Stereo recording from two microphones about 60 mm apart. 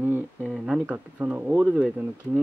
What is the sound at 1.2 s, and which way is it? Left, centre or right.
Speech, right.